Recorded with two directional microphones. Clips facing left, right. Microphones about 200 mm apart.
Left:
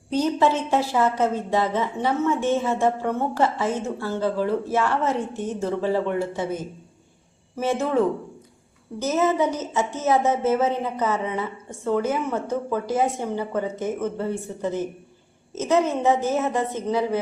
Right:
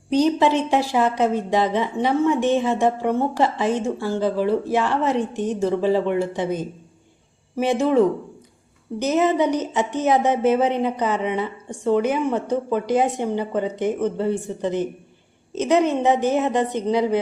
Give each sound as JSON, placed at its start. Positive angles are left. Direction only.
{"t": 0.1, "sound": "a woman's voice", "side_deg": -15}